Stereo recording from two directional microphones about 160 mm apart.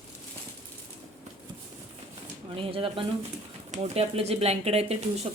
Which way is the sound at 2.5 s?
35° right (ahead or behind).